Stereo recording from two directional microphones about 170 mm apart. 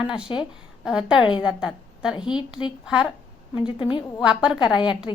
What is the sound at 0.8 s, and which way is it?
A woman's voice, 5° right (ahead or behind).